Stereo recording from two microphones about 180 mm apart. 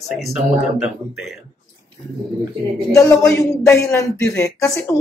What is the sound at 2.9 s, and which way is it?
Speech, 15° left (ahead or behind).